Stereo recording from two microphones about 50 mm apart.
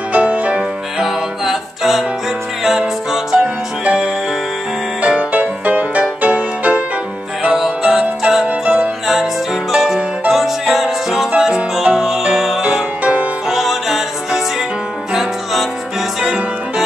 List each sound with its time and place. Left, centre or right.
0.1 s music: right
0.9 s music: centre
3.1 s music: centre
5.0 s music: right
7.4 s music: centre
9.0 s music: centre
13.0 s music: right
13.5 s music: centre
16.2 s music: centre